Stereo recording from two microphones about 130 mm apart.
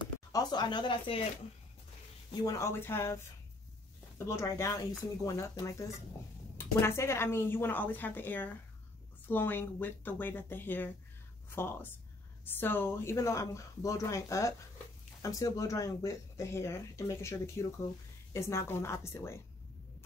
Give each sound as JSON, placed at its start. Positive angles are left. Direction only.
{"t": 0.0, "sound": "speech", "side_deg": 30}
{"t": 2.4, "sound": "speech", "side_deg": 20}
{"t": 4.3, "sound": "a woman's voice", "side_deg": 25}